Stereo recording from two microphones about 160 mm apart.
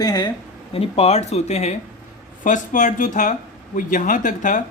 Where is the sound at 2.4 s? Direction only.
50° left (ahead or behind).